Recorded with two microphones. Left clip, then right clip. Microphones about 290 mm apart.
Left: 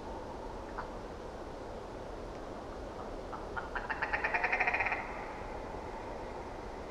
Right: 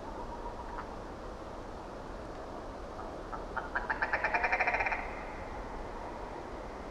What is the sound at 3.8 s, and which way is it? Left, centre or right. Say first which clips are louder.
Vehicle: right 1 dB; right.